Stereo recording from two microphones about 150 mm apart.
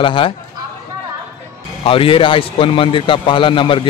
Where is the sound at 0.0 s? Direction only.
35° left (ahead or behind).